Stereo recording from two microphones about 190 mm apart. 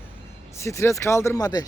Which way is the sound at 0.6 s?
15° left (ahead or behind).